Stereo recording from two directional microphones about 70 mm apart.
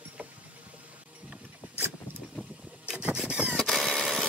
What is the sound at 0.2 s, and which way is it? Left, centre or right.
Vehicle, centre.